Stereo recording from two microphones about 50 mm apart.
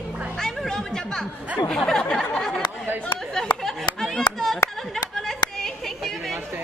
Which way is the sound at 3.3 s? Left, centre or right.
Centre.